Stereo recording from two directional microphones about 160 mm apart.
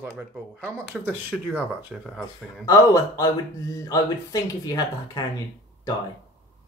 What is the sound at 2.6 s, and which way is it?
Speech, 20° left (ahead or behind).